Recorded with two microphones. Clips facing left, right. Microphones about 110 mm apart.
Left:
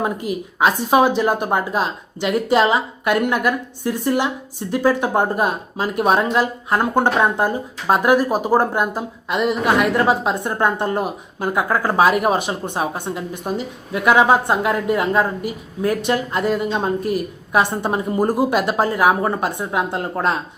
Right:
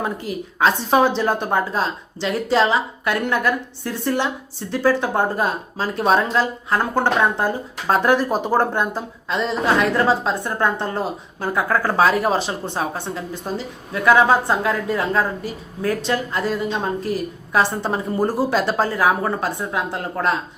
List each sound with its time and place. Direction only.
0.0 s a woman's voice: 15° left (ahead or behind)